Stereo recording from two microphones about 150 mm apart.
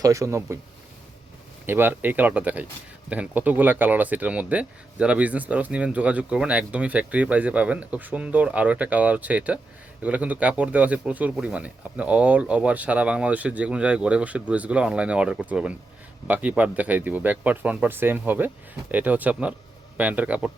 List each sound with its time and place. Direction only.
0.0 s speech: 20° right (ahead or behind)
1.6 s speech: 15° right (ahead or behind)